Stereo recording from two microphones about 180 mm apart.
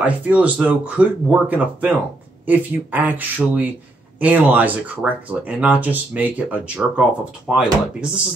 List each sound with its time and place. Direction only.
0.0 s speech: 5° right (ahead or behind)